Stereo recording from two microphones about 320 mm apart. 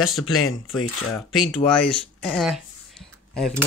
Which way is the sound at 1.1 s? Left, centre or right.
Centre.